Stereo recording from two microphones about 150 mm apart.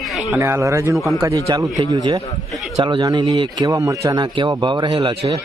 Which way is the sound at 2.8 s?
35° right (ahead or behind).